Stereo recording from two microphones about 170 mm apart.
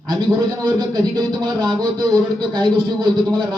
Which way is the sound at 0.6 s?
25° right (ahead or behind).